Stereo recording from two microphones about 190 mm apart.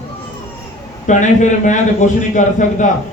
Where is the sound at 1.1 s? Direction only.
40° left (ahead or behind).